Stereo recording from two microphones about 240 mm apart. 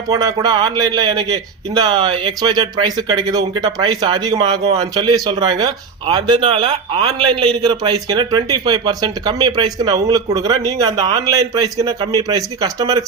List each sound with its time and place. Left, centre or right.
0.1 s speech: centre